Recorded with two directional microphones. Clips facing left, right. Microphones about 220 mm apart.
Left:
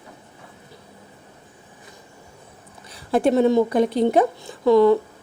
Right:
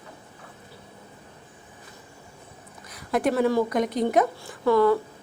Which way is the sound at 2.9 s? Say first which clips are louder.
Left 5 dB; 30° left (ahead or behind).